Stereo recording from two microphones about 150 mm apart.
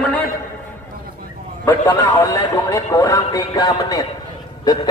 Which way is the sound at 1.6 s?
15° left (ahead or behind).